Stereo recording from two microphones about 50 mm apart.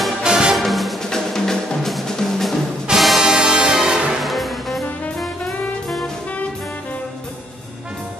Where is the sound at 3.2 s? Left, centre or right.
Centre.